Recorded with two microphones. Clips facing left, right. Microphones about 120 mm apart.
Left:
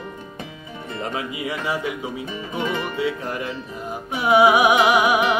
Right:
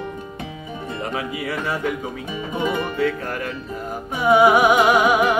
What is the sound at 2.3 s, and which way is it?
Music, 10° right (ahead or behind).